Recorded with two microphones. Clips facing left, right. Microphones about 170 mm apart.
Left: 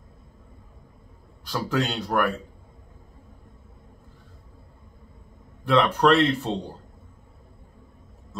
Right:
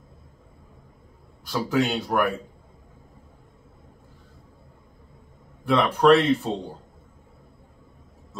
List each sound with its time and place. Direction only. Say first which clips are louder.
1.5 s speech: right 3 dB; 5° right (ahead or behind)
5.7 s speech: right 2 dB; 5° right (ahead or behind)